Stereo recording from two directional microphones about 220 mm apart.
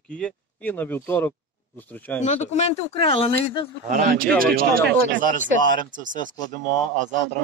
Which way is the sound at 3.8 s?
40° right (ahead or behind).